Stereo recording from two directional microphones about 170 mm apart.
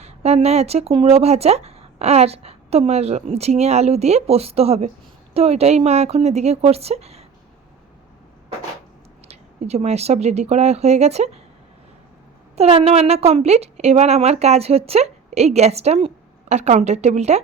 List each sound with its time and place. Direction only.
0.0 s speech: 40° right (ahead or behind)
9.2 s speech: 40° right (ahead or behind)
12.5 s speech: 35° right (ahead or behind)